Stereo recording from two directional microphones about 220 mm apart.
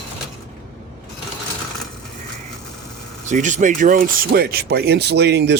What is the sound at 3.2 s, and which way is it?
Speech, 35° right (ahead or behind).